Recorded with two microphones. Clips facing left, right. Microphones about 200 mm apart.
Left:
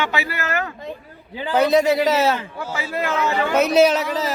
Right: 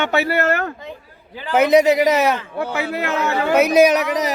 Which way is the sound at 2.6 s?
65° right (ahead or behind).